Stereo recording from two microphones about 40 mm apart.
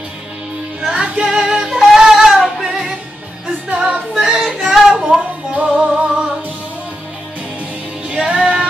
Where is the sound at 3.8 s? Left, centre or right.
Right.